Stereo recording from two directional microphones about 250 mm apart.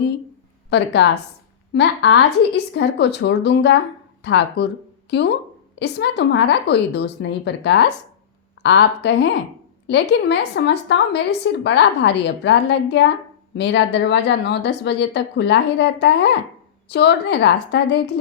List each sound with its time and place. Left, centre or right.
0.7 s a woman's voice: left
5.8 s a woman's voice: left